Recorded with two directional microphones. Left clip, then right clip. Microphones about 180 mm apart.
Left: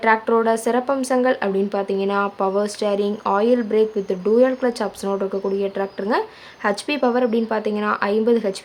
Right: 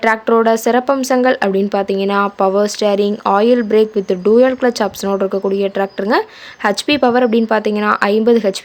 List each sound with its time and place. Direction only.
0.0 s speech: 35° right (ahead or behind)